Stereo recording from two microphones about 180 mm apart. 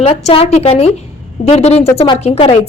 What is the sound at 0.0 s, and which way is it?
Speech, 35° left (ahead or behind).